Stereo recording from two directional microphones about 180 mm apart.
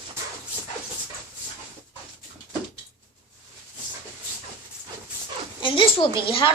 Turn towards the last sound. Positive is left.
turn(degrees=30)  # may be behind; listen again after turning